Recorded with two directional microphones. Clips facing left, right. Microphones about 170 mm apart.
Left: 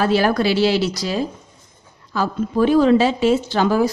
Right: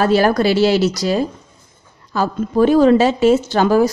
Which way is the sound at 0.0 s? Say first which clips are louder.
Right 3 dB; 45° right (ahead or behind).